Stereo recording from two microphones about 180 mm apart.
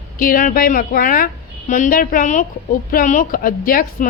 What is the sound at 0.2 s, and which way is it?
A woman's voice, 50° left (ahead or behind).